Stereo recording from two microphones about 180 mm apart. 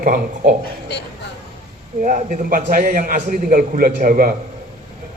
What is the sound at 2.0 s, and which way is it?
A man's voice, 50° right (ahead or behind).